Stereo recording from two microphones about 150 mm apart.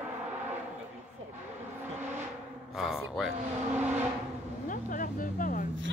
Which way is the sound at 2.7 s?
5° right (ahead or behind).